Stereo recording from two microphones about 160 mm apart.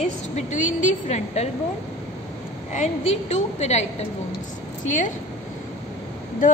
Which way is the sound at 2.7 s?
45° left (ahead or behind).